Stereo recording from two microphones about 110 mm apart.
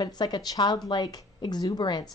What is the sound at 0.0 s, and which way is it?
Speech, 40° left (ahead or behind).